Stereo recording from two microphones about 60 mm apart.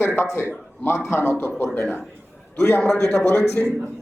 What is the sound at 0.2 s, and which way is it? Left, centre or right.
Speech, left.